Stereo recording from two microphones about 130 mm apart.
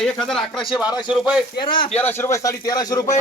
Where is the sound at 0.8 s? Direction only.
30° left (ahead or behind).